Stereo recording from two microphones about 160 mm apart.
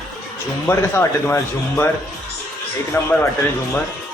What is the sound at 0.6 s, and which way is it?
Speech, 15° left (ahead or behind).